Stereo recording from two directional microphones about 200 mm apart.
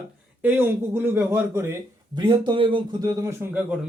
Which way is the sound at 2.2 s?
25° right (ahead or behind).